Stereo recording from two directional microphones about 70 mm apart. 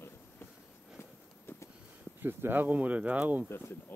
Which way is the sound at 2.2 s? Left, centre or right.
Right.